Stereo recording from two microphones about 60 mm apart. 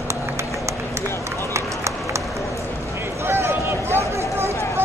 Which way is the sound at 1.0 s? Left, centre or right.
Right.